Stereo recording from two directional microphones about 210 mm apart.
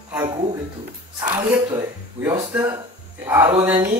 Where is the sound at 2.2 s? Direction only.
20° right (ahead or behind).